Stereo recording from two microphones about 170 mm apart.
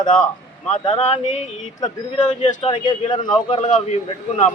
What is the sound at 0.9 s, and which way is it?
Speech, 35° left (ahead or behind).